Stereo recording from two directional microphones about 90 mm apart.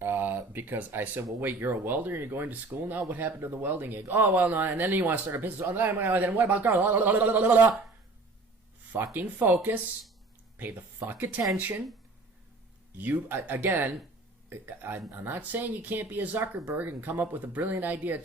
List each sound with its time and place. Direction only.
0.0 s speech: 25° right (ahead or behind)
9.1 s speech: 20° right (ahead or behind)
11.0 s speech: 30° right (ahead or behind)
13.0 s speech: 20° right (ahead or behind)